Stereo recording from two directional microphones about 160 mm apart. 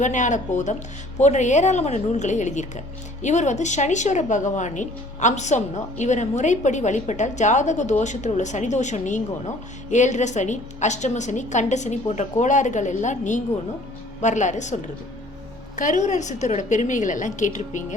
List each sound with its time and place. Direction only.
0.0 s a woman's voice: 50° left (ahead or behind)